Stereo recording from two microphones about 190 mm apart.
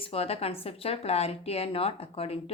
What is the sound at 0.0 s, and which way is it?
A woman's voice, 30° left (ahead or behind).